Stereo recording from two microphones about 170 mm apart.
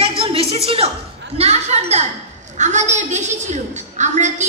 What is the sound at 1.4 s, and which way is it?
A woman's voice, 40° right (ahead or behind).